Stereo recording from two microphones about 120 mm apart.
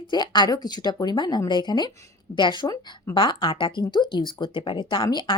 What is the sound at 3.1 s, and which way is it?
Speech, 45° left (ahead or behind).